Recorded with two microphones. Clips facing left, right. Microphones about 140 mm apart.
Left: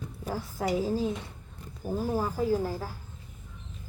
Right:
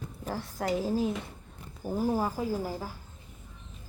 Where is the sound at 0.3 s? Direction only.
5° left (ahead or behind).